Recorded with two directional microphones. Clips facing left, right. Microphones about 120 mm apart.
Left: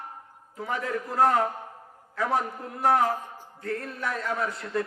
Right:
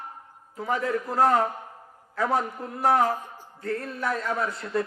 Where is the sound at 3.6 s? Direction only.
35° right (ahead or behind).